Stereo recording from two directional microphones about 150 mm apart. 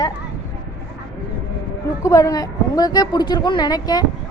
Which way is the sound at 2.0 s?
20° left (ahead or behind).